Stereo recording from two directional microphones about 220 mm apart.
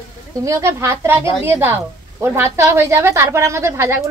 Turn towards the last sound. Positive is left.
turn(degrees=-10)  # may be behind; listen again after turning